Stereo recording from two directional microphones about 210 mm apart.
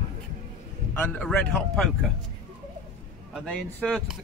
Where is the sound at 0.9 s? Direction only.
5° left (ahead or behind).